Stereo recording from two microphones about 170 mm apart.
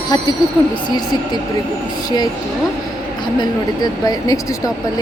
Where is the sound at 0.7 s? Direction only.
25° left (ahead or behind).